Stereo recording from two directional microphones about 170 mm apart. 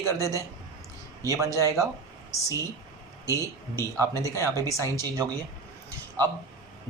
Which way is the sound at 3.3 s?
20° right (ahead or behind).